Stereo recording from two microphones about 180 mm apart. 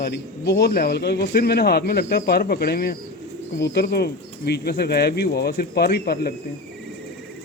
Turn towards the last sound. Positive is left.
turn(degrees=60)  # may be behind; listen again after turning